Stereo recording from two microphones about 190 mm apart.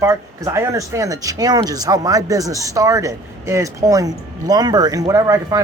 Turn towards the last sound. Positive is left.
turn(degrees=-15)  # may be behind; listen again after turning